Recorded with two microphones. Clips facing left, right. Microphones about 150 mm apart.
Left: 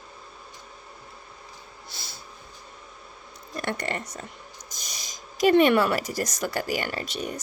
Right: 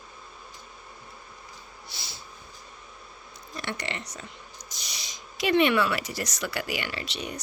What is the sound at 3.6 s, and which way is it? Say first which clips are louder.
Speech: left 5 dB; 50° left (ahead or behind).